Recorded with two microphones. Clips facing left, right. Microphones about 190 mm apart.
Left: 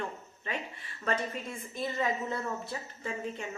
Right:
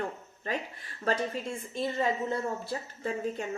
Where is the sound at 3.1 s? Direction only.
40° right (ahead or behind).